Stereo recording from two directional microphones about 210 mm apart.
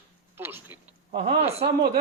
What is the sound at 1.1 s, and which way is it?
Speech, 30° right (ahead or behind).